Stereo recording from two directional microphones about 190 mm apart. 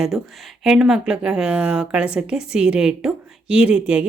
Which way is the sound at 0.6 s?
Centre (ahead or behind).